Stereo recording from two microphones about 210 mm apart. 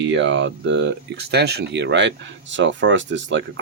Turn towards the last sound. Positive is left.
turn(degrees=-60)  # may be behind; listen again after turning